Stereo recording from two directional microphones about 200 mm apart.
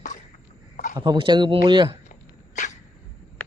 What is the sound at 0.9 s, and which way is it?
Speech, 25° right (ahead or behind).